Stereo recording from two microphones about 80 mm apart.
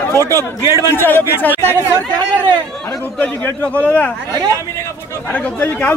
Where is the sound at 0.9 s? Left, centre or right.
Left.